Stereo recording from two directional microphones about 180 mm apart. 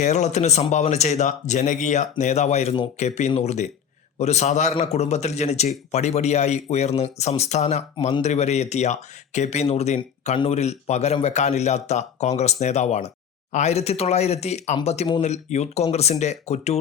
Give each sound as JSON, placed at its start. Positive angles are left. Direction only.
{"t": 0.0, "sound": "speech", "side_deg": 40}